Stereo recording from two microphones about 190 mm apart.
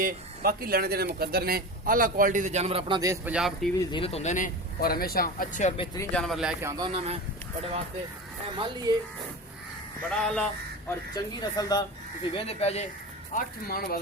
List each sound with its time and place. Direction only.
0.0 s speech: 50° right (ahead or behind); by 3.0 s 30° right (ahead or behind)
3.0 s speech: 15° right (ahead or behind)
3.3 s speech: centre (ahead or behind)
3.9 s speech: 30° left (ahead or behind)
6.0 s speech: 5° left (ahead or behind)
6.6 s speech: 15° right (ahead or behind)
6.8 s speech: 30° right (ahead or behind)
8.5 s speech: 25° right (ahead or behind)
10.1 s speech: 5° left (ahead or behind)
10.8 s speech: 20° left (ahead or behind)
12.3 s speech: 30° left (ahead or behind)
13.3 s speech: 50° left (ahead or behind)